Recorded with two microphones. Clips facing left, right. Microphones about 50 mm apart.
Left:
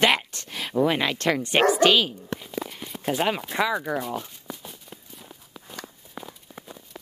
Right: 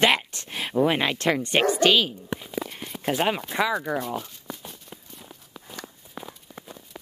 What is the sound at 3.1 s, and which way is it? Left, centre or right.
Speech, centre.